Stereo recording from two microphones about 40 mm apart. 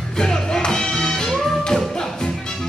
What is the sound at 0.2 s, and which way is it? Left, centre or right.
Music, centre.